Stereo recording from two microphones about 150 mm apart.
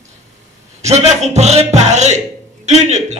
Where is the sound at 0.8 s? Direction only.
50° right (ahead or behind).